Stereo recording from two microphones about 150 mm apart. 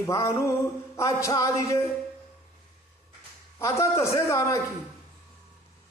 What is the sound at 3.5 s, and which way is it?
A man's voice, 20° left (ahead or behind).